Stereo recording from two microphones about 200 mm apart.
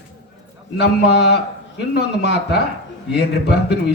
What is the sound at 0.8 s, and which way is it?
Speech, 55° left (ahead or behind).